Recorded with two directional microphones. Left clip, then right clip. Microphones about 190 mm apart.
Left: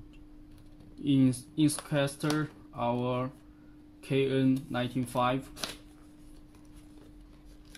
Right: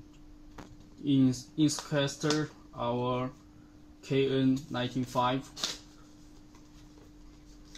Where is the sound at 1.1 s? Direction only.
20° left (ahead or behind).